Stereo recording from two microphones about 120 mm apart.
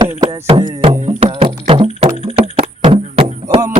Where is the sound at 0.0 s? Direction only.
45° right (ahead or behind).